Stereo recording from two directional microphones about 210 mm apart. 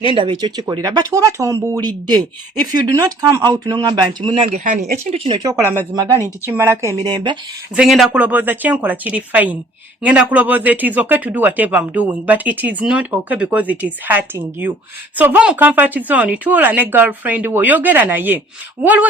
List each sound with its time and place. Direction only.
0.1 s speech: 25° right (ahead or behind)
4.4 s speech: 40° right (ahead or behind); by 7.3 s 20° right (ahead or behind)
7.8 s speech: centre (ahead or behind)